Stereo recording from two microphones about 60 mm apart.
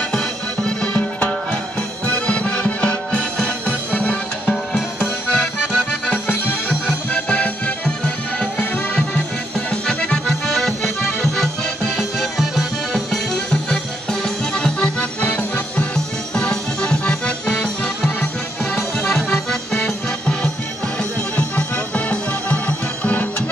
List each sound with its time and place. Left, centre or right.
0.1 s music: centre
9.7 s accordion: centre
12.9 s music: centre
14.2 s accordion: centre
18.8 s music: centre